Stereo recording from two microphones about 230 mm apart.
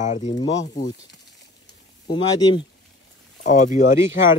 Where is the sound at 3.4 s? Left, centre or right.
Left.